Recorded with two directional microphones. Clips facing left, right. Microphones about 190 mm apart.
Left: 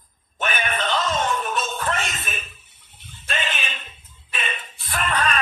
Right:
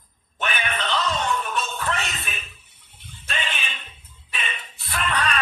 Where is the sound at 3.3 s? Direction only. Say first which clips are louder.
Left 3 dB; 45° left (ahead or behind).